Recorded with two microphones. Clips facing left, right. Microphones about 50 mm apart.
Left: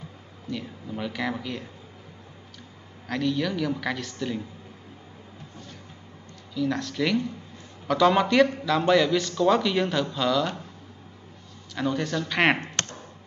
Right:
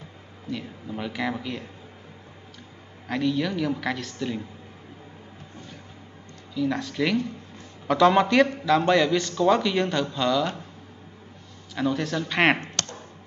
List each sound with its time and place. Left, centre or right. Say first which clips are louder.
0.5 s a woman's voice: right 1 dB; centre
3.1 s a woman's voice: right 1 dB; centre
6.5 s a woman's voice: right 1 dB; centre
11.7 s a man's voice: right 1 dB; centre
12.8 s a sound: left 1 dB; left